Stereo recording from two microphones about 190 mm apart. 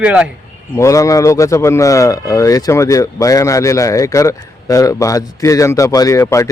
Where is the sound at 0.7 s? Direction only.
15° left (ahead or behind).